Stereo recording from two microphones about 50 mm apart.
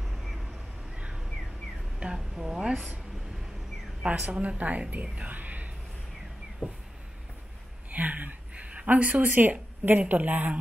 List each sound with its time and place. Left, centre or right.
0.0 s vehicle: centre
2.1 s a woman's voice: centre
4.1 s a woman's voice: right
5.3 s a sound: right
7.9 s a woman's voice: right